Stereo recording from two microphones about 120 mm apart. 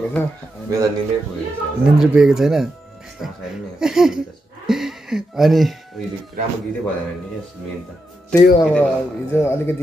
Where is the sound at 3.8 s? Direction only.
5° right (ahead or behind).